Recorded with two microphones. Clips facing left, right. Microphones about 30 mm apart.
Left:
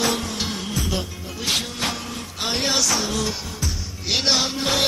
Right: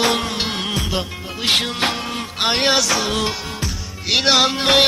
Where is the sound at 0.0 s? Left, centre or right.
Right.